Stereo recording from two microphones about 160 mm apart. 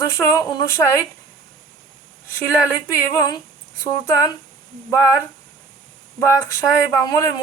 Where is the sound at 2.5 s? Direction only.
15° left (ahead or behind).